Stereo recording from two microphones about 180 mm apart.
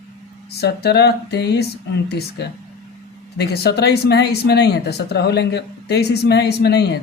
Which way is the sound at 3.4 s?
65° left (ahead or behind).